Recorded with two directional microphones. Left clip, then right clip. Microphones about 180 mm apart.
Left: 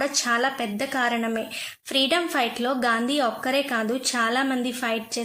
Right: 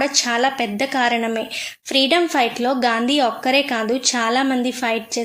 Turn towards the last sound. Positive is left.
turn(degrees=-20)  # may be behind; listen again after turning